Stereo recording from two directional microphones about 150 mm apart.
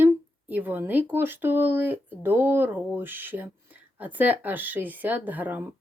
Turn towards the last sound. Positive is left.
turn(degrees=-10)  # may be behind; listen again after turning